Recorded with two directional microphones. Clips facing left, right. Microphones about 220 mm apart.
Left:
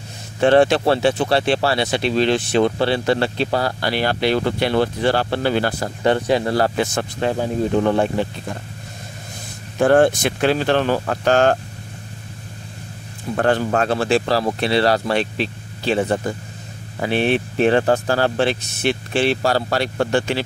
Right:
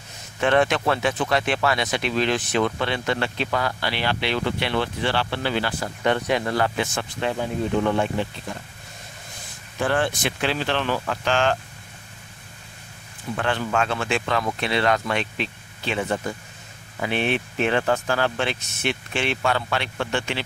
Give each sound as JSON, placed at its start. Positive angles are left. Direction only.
{"t": 0.4, "sound": "speech", "side_deg": 30}
{"t": 9.8, "sound": "speech", "side_deg": 45}
{"t": 13.4, "sound": "speech", "side_deg": 40}